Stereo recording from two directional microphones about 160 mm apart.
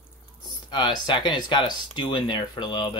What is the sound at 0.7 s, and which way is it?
Speech, 30° left (ahead or behind).